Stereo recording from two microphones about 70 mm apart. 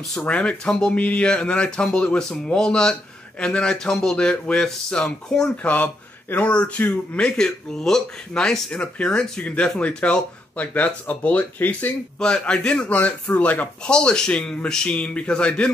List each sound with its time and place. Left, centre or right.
0.3 s speech: centre
5.6 s speech: left